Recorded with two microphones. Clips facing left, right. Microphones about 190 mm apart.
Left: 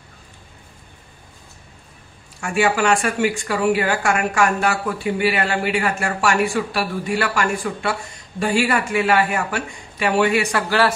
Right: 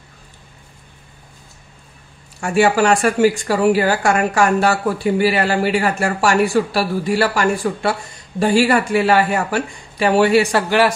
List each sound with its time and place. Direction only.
2.4 s speech: 35° right (ahead or behind)